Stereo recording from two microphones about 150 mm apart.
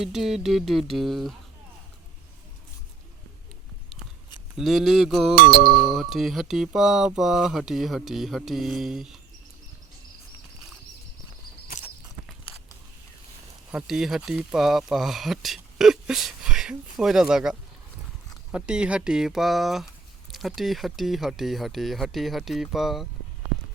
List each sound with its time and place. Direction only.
0.0 s speech: centre (ahead or behind)
4.5 s speech: centre (ahead or behind)
5.3 s music: 70° right (ahead or behind)
5.9 s speech: centre (ahead or behind)
11.7 s a sound: 85° left
13.7 s speech: 5° right (ahead or behind)